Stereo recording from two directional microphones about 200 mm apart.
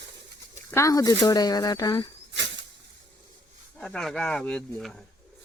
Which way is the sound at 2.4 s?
65° right (ahead or behind).